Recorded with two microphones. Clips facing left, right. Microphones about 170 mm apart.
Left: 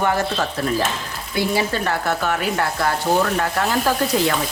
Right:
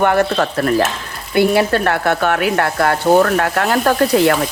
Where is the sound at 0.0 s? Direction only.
60° right (ahead or behind).